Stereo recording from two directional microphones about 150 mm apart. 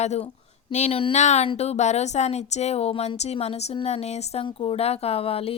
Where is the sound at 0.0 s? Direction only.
50° left (ahead or behind).